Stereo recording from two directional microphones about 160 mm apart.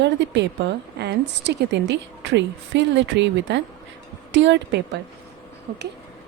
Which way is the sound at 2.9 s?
90° right.